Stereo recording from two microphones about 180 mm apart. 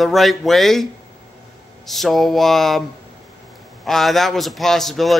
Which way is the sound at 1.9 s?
Centre (ahead or behind).